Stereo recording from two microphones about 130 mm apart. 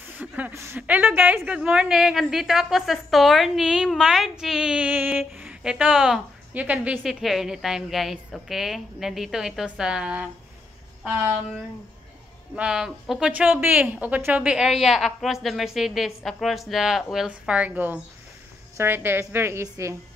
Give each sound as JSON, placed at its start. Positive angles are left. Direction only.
{"t": 0.1, "sound": "a woman's voice", "side_deg": -10}
{"t": 12.5, "sound": "a woman's voice", "side_deg": -5}